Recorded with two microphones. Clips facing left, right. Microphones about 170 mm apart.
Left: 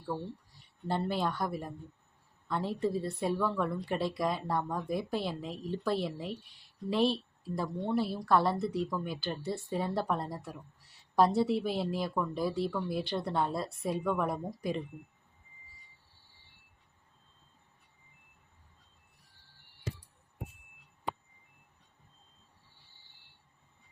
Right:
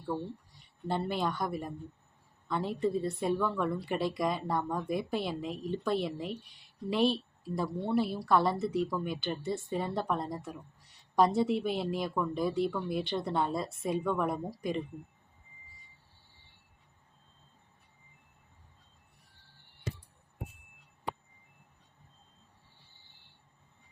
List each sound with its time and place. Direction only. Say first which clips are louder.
0.1 s a woman's voice: right 2 dB; centre (ahead or behind)